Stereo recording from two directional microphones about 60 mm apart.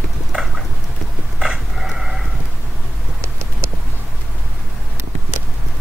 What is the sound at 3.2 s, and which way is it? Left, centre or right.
Clip-clop, right.